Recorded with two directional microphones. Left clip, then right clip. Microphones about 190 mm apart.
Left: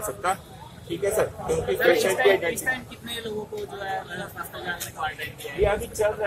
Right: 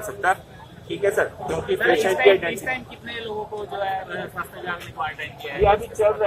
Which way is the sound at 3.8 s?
40° left (ahead or behind).